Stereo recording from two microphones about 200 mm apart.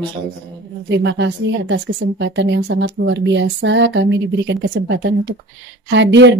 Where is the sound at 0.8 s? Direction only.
60° right (ahead or behind).